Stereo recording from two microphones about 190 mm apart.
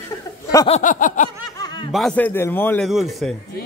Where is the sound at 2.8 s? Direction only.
Centre (ahead or behind).